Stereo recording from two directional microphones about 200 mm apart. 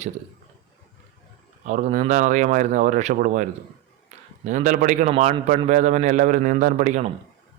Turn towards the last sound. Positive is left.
turn(degrees=-40)  # may be behind; listen again after turning